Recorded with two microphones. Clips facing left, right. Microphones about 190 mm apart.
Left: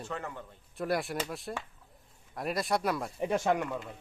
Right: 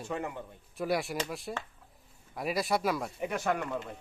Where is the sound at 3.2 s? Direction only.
25° left (ahead or behind).